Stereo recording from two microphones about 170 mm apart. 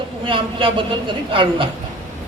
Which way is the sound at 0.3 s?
30° right (ahead or behind).